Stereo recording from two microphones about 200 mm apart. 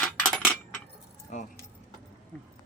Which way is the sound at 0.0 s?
5° left (ahead or behind).